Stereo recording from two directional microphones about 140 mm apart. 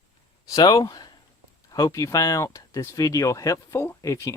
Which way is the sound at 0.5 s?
30° left (ahead or behind).